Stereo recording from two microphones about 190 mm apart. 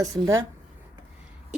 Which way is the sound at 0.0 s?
15° right (ahead or behind).